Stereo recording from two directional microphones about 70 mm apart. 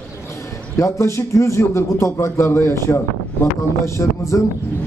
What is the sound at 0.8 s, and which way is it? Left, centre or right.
A man's voice, left.